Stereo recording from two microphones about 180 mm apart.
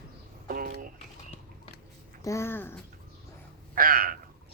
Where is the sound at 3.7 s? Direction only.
55° right (ahead or behind).